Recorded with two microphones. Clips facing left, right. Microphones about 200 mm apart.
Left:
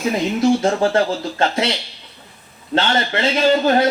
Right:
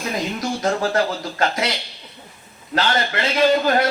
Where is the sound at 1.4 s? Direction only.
25° left (ahead or behind).